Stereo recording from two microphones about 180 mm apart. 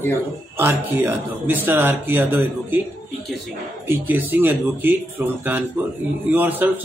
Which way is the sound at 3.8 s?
10° right (ahead or behind).